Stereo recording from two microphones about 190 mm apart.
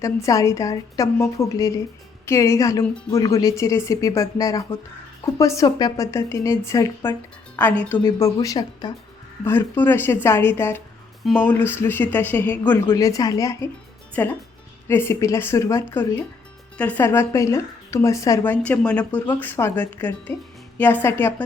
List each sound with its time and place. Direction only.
0.0 s speech: 15° left (ahead or behind)